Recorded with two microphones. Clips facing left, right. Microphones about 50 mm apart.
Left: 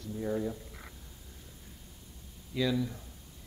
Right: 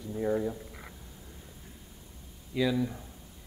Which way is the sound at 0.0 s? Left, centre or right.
Centre.